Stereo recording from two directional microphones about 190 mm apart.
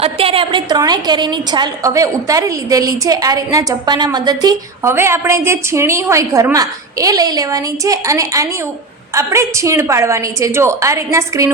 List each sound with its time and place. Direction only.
0.0 s a woman's voice: 30° right (ahead or behind)